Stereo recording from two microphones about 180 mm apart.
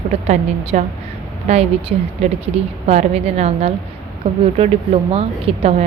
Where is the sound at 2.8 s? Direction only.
35° right (ahead or behind).